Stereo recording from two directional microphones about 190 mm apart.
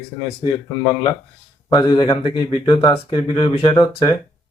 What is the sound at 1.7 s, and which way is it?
Speech, 20° left (ahead or behind).